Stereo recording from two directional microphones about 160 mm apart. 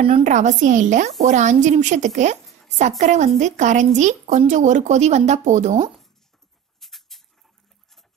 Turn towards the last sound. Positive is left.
turn(degrees=0)  # may be behind; listen again after turning